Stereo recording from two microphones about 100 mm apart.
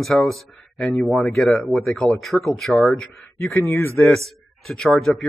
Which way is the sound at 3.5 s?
20° left (ahead or behind).